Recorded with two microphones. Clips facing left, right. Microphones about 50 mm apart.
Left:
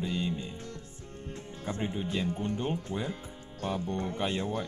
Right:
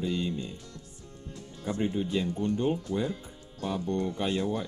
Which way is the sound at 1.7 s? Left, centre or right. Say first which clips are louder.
Right 4 dB; left.